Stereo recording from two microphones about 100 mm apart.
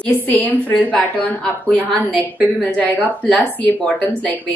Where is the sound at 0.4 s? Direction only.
15° left (ahead or behind).